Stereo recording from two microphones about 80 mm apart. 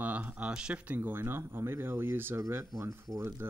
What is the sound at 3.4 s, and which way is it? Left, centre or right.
Speech, right.